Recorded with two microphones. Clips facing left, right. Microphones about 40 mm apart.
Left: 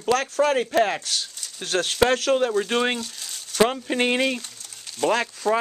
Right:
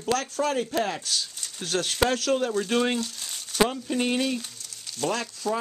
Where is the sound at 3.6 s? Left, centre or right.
Left.